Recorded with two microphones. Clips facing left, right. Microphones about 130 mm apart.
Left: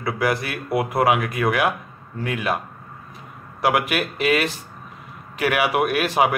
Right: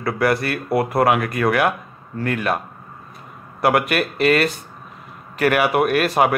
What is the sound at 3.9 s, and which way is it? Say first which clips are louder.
Speech: right 3 dB; 5° left (ahead or behind).